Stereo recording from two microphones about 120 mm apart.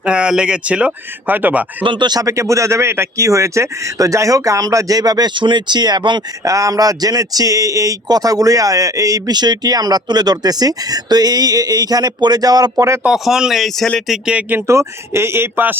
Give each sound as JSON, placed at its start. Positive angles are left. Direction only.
{"t": 0.0, "sound": "speech", "side_deg": -10}
{"t": 1.8, "sound": "speech", "side_deg": -40}
{"t": 6.4, "sound": "a man's voice", "side_deg": -25}
{"t": 13.0, "sound": "speech", "side_deg": -5}
{"t": 14.3, "sound": "speech", "side_deg": -10}
{"t": 14.7, "sound": "speech", "side_deg": -25}